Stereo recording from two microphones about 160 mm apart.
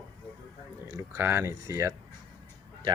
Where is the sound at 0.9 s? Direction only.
20° right (ahead or behind).